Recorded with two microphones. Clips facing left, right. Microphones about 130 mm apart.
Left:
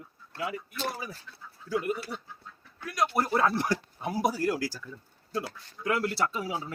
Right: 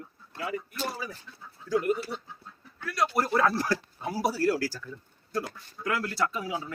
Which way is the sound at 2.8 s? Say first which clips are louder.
Right 1 dB; 15° left (ahead or behind).